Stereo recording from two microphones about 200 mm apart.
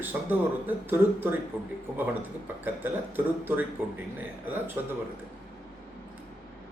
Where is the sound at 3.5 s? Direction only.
10° right (ahead or behind).